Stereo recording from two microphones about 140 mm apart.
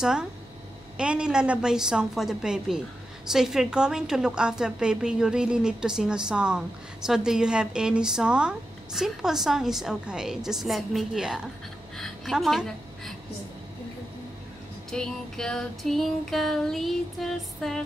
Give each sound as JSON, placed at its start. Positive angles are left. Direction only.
{"t": 0.0, "sound": "a woman's voice", "side_deg": -5}
{"t": 14.9, "sound": "a woman's voice", "side_deg": 5}